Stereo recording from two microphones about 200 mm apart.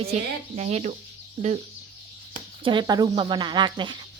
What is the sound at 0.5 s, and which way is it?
Speech, 35° right (ahead or behind).